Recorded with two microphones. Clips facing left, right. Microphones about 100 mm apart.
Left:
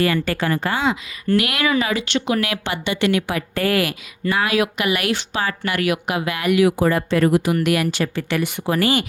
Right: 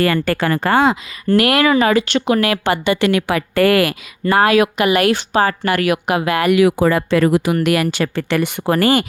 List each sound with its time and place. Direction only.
0.0 s speech: 60° right (ahead or behind)
1.3 s speech: 40° right (ahead or behind)
3.1 s speech: 80° right
7.6 s speech: 70° right (ahead or behind); by 9.0 s 50° right (ahead or behind)